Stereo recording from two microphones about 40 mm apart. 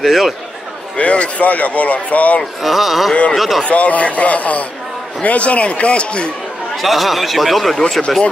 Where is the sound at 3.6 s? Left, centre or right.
Left.